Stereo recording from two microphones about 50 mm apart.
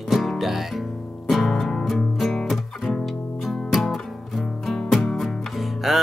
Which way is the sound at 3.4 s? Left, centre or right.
Centre.